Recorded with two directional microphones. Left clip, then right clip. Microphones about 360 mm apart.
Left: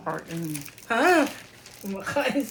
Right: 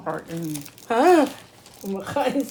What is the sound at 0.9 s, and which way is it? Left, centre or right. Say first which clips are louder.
Speech: right 4 dB; right.